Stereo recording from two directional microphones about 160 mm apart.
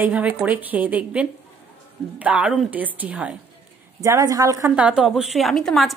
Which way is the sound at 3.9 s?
20° right (ahead or behind).